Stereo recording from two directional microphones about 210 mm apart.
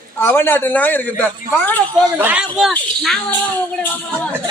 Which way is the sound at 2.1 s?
10° right (ahead or behind).